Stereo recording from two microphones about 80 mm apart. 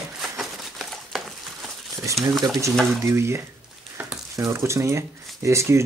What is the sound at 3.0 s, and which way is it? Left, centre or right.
Speech, right.